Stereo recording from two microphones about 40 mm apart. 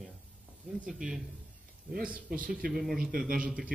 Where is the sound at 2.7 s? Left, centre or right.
Centre.